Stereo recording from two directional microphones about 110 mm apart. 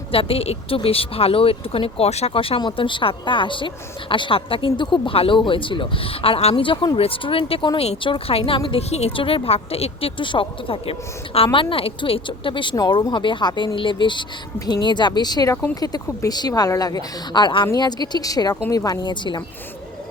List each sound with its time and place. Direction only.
0.1 s speech: 60° left (ahead or behind)
2.6 s speech: 45° left (ahead or behind)
12.7 s speech: 35° left (ahead or behind)